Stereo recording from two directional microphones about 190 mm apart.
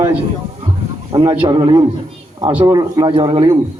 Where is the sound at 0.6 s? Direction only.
20° right (ahead or behind).